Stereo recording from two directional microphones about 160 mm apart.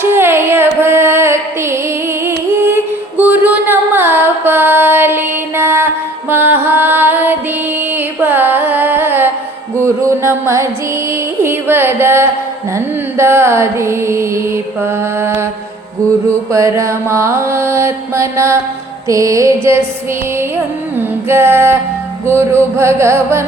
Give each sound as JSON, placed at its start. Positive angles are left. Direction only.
{"t": 0.0, "sound": "carnatic music", "side_deg": -15}
{"t": 9.7, "sound": "music", "side_deg": -15}
{"t": 12.7, "sound": "carnatic music", "side_deg": -15}
{"t": 16.5, "sound": "mantra", "side_deg": -20}
{"t": 21.2, "sound": "mantra", "side_deg": -15}